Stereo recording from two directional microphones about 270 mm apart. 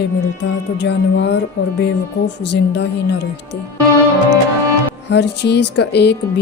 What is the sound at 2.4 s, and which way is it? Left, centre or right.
Speech, left.